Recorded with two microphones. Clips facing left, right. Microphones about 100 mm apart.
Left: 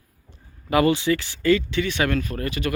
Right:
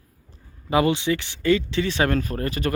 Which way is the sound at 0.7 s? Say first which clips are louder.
Left 1 dB; 20° right (ahead or behind).